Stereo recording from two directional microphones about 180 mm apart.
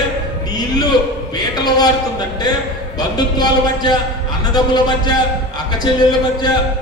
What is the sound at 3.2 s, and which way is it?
Speech, 20° left (ahead or behind).